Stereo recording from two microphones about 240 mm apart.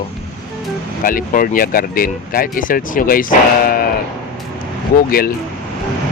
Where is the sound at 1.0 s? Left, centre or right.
Left.